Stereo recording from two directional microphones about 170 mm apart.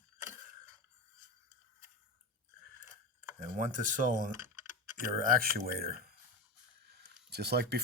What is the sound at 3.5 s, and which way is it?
Speech, 50° right (ahead or behind).